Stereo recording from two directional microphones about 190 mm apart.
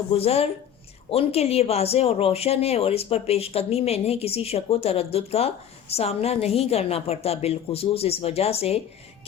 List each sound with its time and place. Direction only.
0.1 s speech: 30° left (ahead or behind)